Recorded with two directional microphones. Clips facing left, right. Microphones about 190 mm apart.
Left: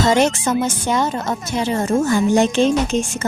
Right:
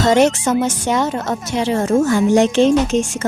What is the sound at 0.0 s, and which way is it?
A woman's voice, 65° right (ahead or behind).